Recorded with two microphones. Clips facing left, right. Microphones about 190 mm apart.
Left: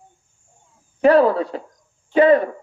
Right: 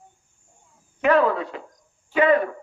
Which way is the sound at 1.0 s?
35° left (ahead or behind).